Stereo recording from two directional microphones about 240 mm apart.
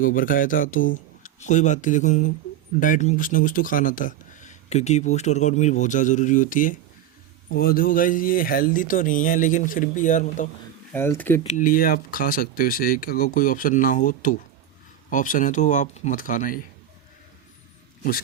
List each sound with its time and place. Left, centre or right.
0.0 s speech: left
10.9 s speech: centre
11.4 s speech: left